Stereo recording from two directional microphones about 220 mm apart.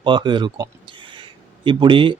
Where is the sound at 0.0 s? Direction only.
20° right (ahead or behind).